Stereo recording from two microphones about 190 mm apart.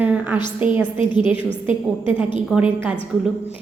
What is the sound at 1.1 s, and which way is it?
Speech, 25° left (ahead or behind).